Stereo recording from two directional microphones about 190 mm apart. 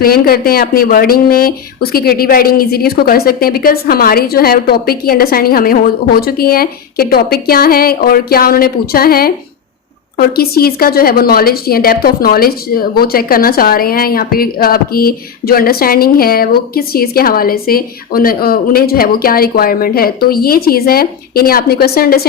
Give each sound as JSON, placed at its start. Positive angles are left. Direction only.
{"t": 0.0, "sound": "a woman's voice", "side_deg": 50}